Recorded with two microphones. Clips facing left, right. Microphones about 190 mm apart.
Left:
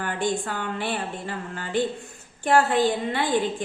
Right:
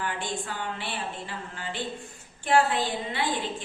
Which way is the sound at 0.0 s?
50° left (ahead or behind).